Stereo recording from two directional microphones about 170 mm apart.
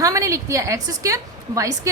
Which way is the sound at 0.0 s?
20° right (ahead or behind).